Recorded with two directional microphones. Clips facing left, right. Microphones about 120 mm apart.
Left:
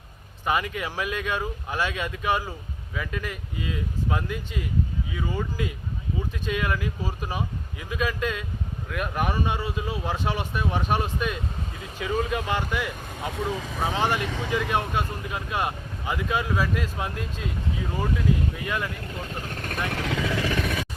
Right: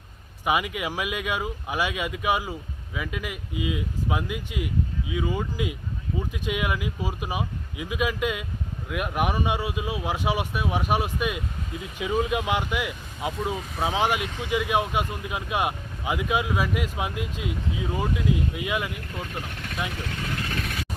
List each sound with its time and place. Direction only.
0.4 s speech: 15° right (ahead or behind)
19.5 s vehicle: 45° left (ahead or behind)
19.9 s vehicle: 90° left